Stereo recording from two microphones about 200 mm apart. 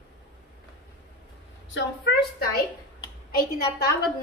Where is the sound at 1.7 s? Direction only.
65° left (ahead or behind).